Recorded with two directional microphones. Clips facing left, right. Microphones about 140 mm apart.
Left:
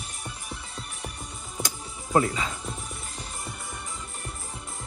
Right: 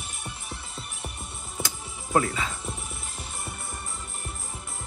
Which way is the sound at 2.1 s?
30° left (ahead or behind).